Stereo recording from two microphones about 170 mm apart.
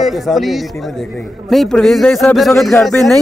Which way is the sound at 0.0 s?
Centre (ahead or behind).